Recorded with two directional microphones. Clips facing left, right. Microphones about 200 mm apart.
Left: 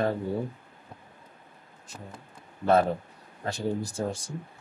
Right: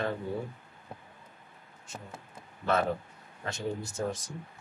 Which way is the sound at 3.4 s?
35° left (ahead or behind).